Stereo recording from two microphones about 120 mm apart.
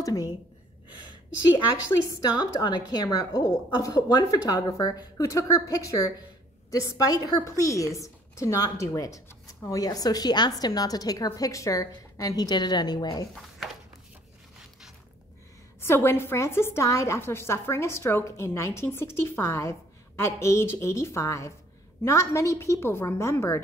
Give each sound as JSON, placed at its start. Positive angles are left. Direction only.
{"t": 0.0, "sound": "a woman's voice", "side_deg": 30}
{"t": 2.0, "sound": "a woman's voice", "side_deg": 35}
{"t": 15.8, "sound": "a woman's voice", "side_deg": 20}